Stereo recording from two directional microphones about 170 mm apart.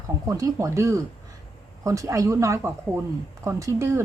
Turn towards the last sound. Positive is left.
turn(degrees=-15)  # may be behind; listen again after turning